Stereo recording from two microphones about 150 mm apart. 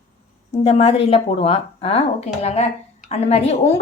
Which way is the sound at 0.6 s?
45° left (ahead or behind).